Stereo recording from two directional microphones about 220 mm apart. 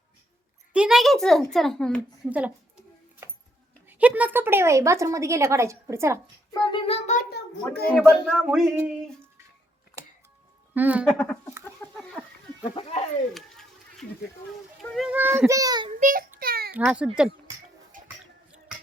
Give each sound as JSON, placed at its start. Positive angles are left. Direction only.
{"t": 0.7, "sound": "speech", "side_deg": -5}
{"t": 3.8, "sound": "speech", "side_deg": -5}
{"t": 6.5, "sound": "a sound", "side_deg": 20}
{"t": 7.9, "sound": "speech", "side_deg": 0}
{"t": 10.8, "sound": "speech", "side_deg": -5}
{"t": 11.1, "sound": "speech", "side_deg": 5}
{"t": 11.8, "sound": "a sound", "side_deg": 5}
{"t": 12.7, "sound": "speech", "side_deg": 30}
{"t": 13.3, "sound": "children playing", "side_deg": 0}
{"t": 14.8, "sound": "speech", "side_deg": 0}
{"t": 16.0, "sound": "a child's voice", "side_deg": -35}
{"t": 16.4, "sound": "a sound", "side_deg": -45}
{"t": 16.7, "sound": "speech", "side_deg": -5}
{"t": 17.9, "sound": "a sound", "side_deg": -35}